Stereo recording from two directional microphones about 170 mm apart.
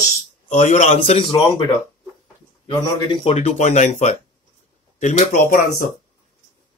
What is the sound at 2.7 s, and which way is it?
A man's voice, 30° left (ahead or behind).